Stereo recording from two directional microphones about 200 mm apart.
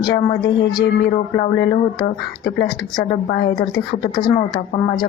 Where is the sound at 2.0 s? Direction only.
20° left (ahead or behind).